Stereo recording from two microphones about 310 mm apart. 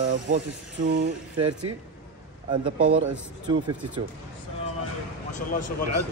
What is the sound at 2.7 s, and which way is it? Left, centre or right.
Speech, right.